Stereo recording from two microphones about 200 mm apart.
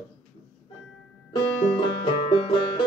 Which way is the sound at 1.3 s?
25° left (ahead or behind).